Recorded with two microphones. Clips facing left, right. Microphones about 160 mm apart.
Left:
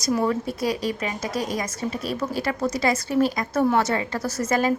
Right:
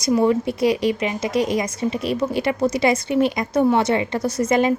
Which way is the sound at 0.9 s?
20° right (ahead or behind).